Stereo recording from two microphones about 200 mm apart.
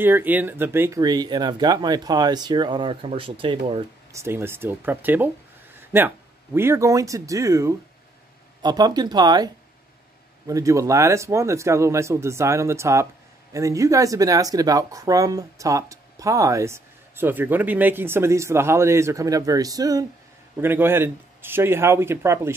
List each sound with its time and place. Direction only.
0.0 s speech: 10° right (ahead or behind); by 3.8 s 25° right (ahead or behind)
4.1 s speech: 15° right (ahead or behind)